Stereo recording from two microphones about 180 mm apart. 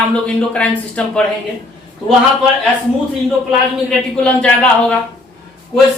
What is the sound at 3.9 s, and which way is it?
Speech, 5° left (ahead or behind).